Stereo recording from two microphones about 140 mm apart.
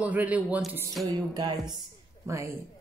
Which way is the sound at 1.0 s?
30° right (ahead or behind).